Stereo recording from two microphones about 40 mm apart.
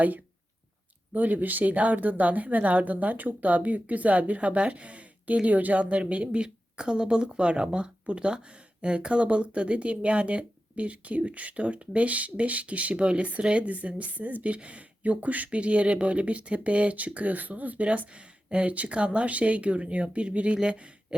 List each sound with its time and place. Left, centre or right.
1.1 s a woman's voice: right